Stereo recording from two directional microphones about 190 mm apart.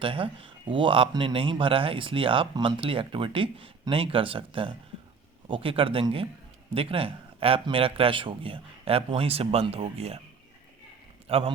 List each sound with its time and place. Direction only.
0.0 s speech: 30° right (ahead or behind)
11.3 s speech: 30° right (ahead or behind)